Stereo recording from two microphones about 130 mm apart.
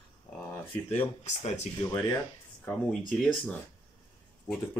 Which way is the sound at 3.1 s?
5° left (ahead or behind).